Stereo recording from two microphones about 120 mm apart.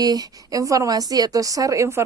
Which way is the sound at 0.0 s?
30° right (ahead or behind).